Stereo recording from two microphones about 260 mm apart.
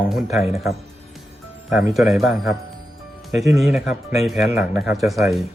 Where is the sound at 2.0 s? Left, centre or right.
Centre.